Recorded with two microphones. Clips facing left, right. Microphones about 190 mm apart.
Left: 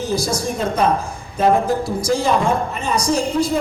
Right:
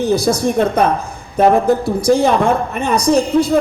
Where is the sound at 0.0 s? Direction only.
60° right (ahead or behind).